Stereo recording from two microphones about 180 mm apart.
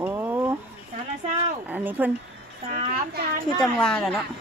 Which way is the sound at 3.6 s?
5° left (ahead or behind).